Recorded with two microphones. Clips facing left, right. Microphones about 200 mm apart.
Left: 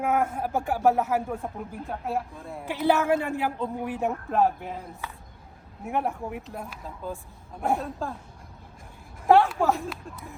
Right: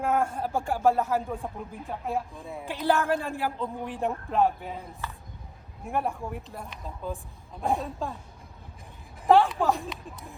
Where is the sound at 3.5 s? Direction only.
10° left (ahead or behind).